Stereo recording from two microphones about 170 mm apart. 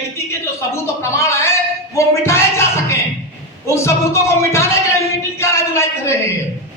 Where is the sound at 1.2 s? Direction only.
15° left (ahead or behind).